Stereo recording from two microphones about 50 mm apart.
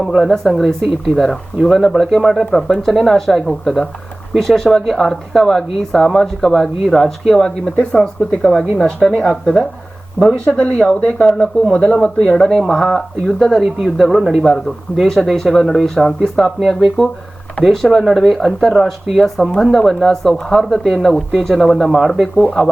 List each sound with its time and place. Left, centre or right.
0.1 s speech: centre
10.4 s speech: left
10.8 s speech: centre
11.2 s speech: left; by 14.4 s centre
15.0 s speech: centre